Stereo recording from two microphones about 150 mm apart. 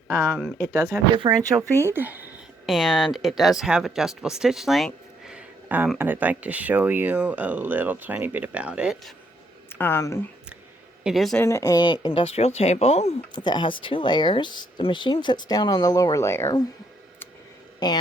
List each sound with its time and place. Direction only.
0.3 s speech: 10° left (ahead or behind)
0.7 s speech: 25° right (ahead or behind)
2.6 s speech: centre (ahead or behind)
5.2 s a sound: 10° right (ahead or behind)
6.0 s speech: 10° right (ahead or behind)
9.6 s speech: 15° left (ahead or behind)
11.0 s a woman's voice: centre (ahead or behind)
11.4 s speech: 20° left (ahead or behind); by 13.1 s 45° left (ahead or behind)
13.3 s speech: 30° left (ahead or behind)
17.7 s speech: 30° left (ahead or behind)